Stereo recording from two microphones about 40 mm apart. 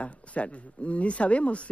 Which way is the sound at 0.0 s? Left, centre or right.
Left.